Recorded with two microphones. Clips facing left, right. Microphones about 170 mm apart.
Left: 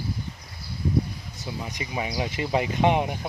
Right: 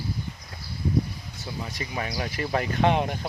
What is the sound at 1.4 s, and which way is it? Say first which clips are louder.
Speech: left 1 dB; 20° left (ahead or behind).